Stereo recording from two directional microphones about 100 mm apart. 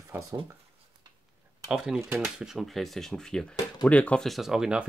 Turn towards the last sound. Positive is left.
turn(degrees=-5)  # may be behind; listen again after turning